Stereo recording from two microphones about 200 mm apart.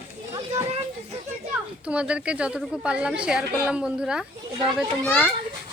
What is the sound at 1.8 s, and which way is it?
A woman's voice, 5° right (ahead or behind).